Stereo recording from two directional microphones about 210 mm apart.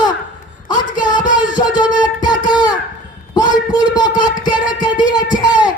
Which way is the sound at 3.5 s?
20° left (ahead or behind).